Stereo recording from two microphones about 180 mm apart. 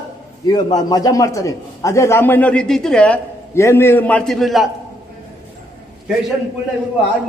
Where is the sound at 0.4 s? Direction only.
20° left (ahead or behind); by 4.7 s centre (ahead or behind).